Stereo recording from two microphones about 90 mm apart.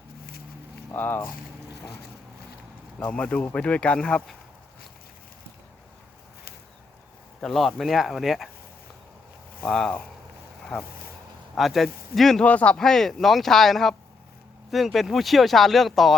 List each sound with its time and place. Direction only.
0.9 s speech: 20° left (ahead or behind)
3.0 s speech: 15° left (ahead or behind)
7.4 s speech: centre (ahead or behind)
9.6 s speech: 5° left (ahead or behind)
11.5 s speech: centre (ahead or behind)
12.5 s speech: 15° left (ahead or behind)